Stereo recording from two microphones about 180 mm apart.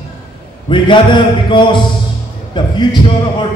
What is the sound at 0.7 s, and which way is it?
Speech, 25° left (ahead or behind).